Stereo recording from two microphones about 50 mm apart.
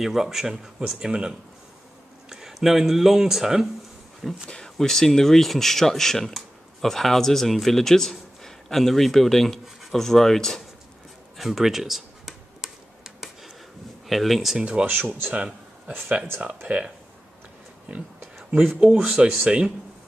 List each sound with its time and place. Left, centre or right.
0.0 s speech: centre
4.5 s speech: centre
11.3 s computer keyboard: centre
14.0 s speech: centre
14.6 s speech: centre
14.9 s speech: right
16.6 s speech: right
19.2 s speech: centre